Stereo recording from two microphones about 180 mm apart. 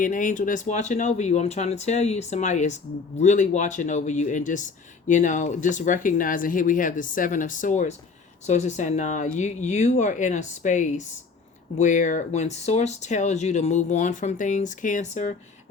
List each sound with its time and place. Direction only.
0.0 s speech: 45° left (ahead or behind)